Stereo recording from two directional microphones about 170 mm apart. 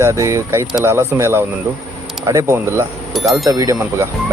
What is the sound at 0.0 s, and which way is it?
Speech, 15° right (ahead or behind).